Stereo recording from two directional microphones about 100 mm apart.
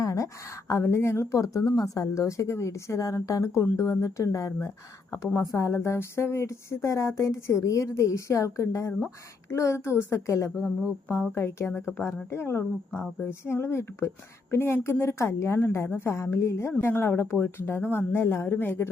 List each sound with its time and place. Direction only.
0.0 s a woman's voice: 35° left (ahead or behind)
10.6 s a sound: 5° right (ahead or behind)
11.1 s a woman's voice: 25° left (ahead or behind)